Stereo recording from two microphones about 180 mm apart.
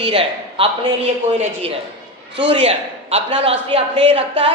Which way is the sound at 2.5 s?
30° right (ahead or behind).